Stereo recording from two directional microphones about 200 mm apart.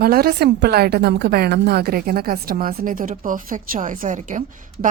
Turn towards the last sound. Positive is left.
turn(degrees=-40)  # may be behind; listen again after turning